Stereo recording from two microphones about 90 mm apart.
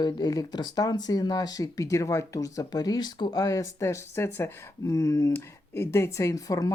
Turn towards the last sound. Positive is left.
turn(degrees=40)  # may be behind; listen again after turning